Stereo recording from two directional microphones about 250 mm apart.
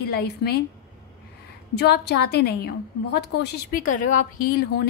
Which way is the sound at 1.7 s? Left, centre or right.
Left.